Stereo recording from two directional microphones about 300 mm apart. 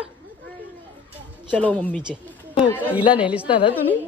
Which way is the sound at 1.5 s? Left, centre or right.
Centre.